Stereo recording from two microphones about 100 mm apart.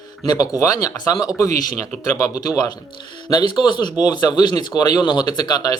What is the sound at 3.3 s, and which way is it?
Speech, 50° left (ahead or behind).